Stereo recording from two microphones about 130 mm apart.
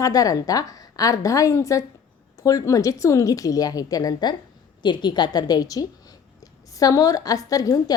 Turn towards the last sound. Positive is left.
turn(degrees=30)  # may be behind; listen again after turning